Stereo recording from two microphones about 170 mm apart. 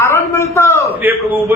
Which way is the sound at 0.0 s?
15° left (ahead or behind).